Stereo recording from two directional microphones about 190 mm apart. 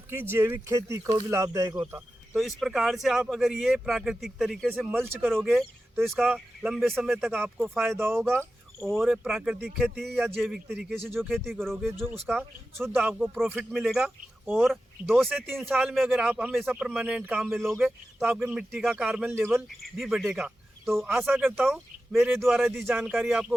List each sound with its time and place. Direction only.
0.1 s speech: 10° right (ahead or behind)
2.3 s speech: centre (ahead or behind)
8.2 s speech: centre (ahead or behind)
11.9 s speech: 10° right (ahead or behind)
19.8 s speech: centre (ahead or behind)
21.1 s speech: 10° right (ahead or behind)
21.5 s speech: centre (ahead or behind)